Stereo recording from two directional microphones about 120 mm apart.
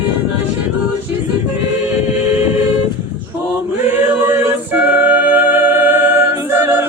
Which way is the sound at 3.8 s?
15° right (ahead or behind).